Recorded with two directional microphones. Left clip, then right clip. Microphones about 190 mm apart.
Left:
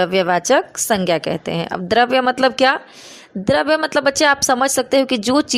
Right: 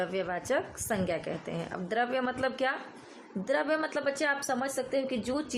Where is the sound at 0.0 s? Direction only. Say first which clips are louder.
Left 16 dB; 45° left (ahead or behind).